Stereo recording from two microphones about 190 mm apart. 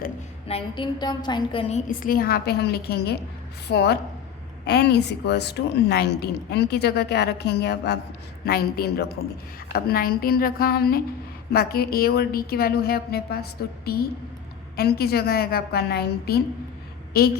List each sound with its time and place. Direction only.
0.4 s a woman's voice: 30° left (ahead or behind)
1.9 s a woman's voice: 50° left (ahead or behind)